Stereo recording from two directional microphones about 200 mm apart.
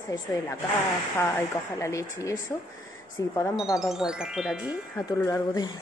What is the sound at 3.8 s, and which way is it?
Music, 5° right (ahead or behind).